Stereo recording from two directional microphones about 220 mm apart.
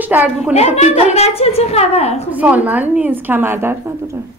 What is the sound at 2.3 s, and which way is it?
A woman's voice, 5° right (ahead or behind).